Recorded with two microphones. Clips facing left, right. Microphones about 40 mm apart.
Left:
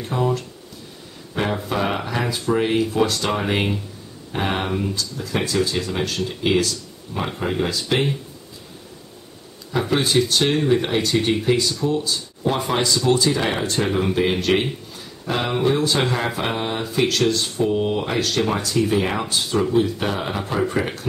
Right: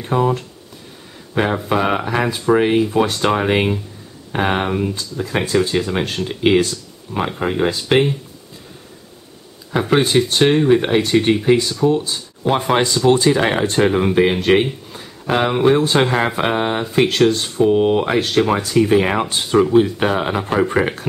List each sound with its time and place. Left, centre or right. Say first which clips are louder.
0.0 s speech: right 4 dB; right
1.7 s speech: right 5 dB; centre
2.1 s speech: right 6 dB; right
9.7 s speech: right 5 dB; right
14.9 s a sound: right 5 dB; right
15.6 s speech: right 5 dB; right